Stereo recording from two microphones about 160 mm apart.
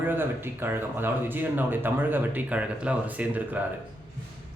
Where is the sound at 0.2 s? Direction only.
15° right (ahead or behind).